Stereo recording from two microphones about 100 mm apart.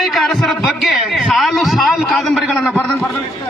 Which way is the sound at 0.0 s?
Centre (ahead or behind).